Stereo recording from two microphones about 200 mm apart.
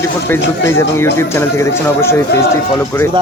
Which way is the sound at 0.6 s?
15° left (ahead or behind).